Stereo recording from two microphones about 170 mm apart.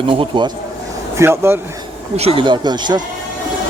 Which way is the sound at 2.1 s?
35° right (ahead or behind).